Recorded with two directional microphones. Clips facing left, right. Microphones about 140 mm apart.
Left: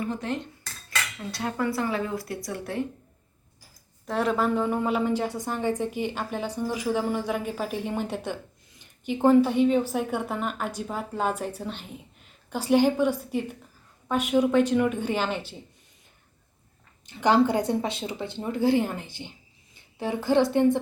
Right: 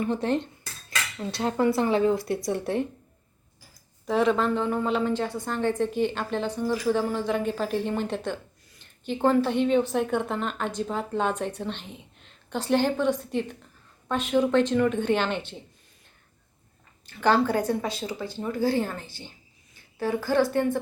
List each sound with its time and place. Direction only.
0.0 s speech: 30° right (ahead or behind)
4.0 s a woman's voice: centre (ahead or behind)
17.1 s speech: 20° left (ahead or behind)